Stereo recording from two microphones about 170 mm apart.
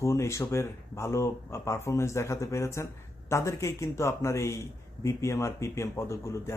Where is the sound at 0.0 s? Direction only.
15° left (ahead or behind).